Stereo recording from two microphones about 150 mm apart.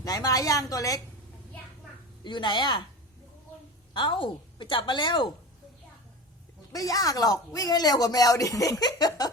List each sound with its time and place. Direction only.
0.0 s a woman's voice: 25° left (ahead or behind)
2.2 s a woman's voice: 30° left (ahead or behind)
3.9 s a woman's voice: 30° left (ahead or behind)
6.7 s speech: 25° left (ahead or behind)